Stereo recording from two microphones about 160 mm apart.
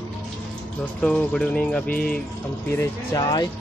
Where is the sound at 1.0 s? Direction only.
5° left (ahead or behind).